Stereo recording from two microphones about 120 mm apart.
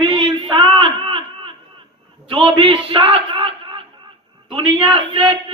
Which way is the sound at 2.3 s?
45° right (ahead or behind).